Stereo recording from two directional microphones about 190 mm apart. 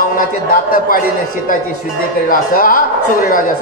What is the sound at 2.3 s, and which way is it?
Speech, 45° left (ahead or behind).